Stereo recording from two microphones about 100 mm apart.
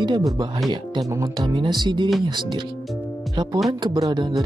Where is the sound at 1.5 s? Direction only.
45° right (ahead or behind).